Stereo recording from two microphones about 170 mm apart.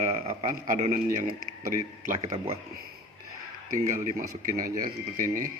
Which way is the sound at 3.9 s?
50° right (ahead or behind).